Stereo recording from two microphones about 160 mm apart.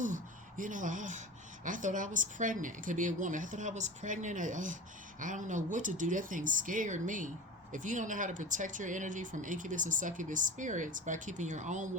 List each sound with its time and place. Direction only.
0.0 s speech: 55° right (ahead or behind)